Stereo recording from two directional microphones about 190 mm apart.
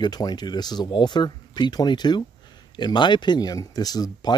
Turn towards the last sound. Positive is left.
turn(degrees=20)  # may be behind; listen again after turning